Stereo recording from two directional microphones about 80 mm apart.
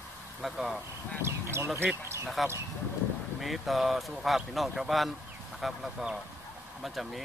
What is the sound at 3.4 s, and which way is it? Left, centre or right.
Speech, centre.